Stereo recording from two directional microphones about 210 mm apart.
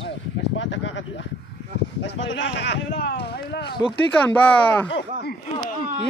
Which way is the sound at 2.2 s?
60° left (ahead or behind).